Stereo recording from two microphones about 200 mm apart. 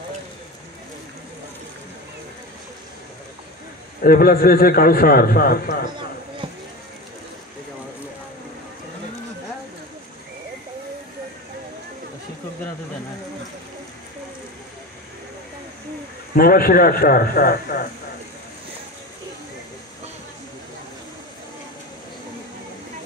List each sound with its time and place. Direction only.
4.0 s a man's voice: 45° left (ahead or behind)
16.3 s a man's voice: 45° left (ahead or behind)